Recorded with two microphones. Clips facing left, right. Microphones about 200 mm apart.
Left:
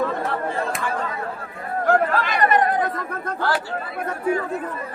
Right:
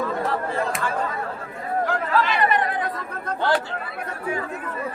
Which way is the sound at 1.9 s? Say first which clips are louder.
Left 6 dB; 50° left (ahead or behind).